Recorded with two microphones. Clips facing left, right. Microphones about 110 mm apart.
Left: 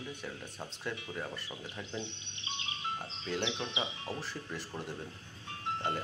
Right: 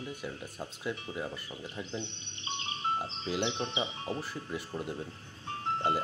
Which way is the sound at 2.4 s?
40° right (ahead or behind).